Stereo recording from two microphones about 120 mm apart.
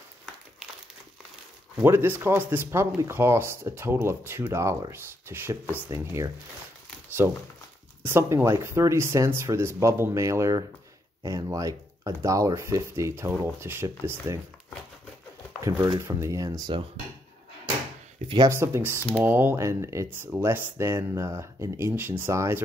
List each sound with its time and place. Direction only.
1.8 s speech: 20° right (ahead or behind)
15.6 s speech: 25° right (ahead or behind)
18.5 s speech: 20° right (ahead or behind)